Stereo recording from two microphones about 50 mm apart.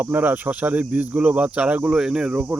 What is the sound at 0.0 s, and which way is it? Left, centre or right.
Speech, right.